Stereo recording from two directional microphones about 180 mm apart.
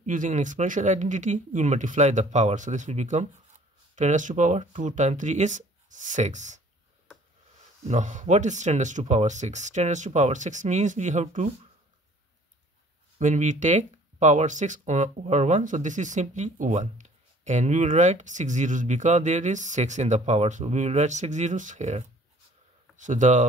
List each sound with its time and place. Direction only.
0.0 s speech: 45° right (ahead or behind)
7.9 s speech: 45° right (ahead or behind)
13.2 s speech: 45° right (ahead or behind)